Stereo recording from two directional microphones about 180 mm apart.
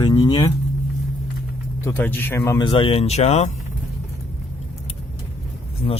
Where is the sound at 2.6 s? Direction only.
30° left (ahead or behind).